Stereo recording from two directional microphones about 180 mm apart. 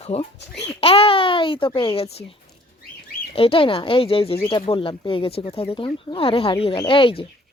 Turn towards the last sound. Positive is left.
turn(degrees=30)  # may be behind; listen again after turning